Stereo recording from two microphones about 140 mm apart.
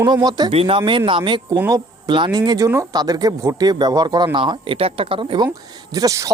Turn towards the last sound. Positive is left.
turn(degrees=-25)  # may be behind; listen again after turning